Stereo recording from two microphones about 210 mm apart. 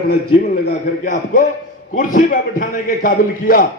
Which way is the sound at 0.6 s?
40° left (ahead or behind).